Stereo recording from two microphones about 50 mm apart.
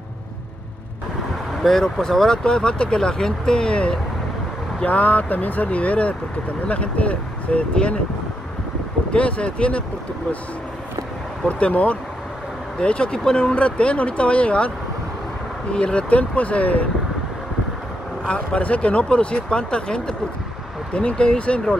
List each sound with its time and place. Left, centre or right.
1.6 s speech: centre
4.8 s speech: left
9.1 s speech: left
11.4 s speech: left
15.7 s speech: left
18.2 s speech: left